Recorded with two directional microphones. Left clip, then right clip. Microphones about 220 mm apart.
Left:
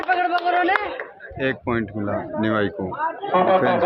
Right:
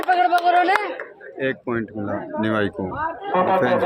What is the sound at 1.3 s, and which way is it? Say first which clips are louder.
Speech: left 1 dB; 15° left (ahead or behind).